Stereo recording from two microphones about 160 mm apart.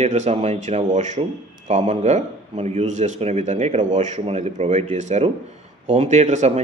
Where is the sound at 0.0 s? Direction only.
45° right (ahead or behind).